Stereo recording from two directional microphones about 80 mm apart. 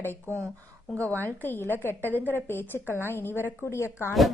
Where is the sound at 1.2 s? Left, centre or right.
Left.